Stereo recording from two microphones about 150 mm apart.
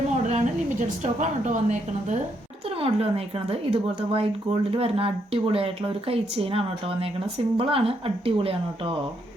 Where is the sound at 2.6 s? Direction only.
40° right (ahead or behind).